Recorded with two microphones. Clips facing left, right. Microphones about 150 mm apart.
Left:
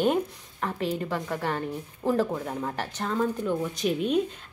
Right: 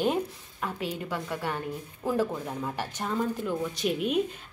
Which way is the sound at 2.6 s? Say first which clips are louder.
Left 2 dB; 10° right (ahead or behind).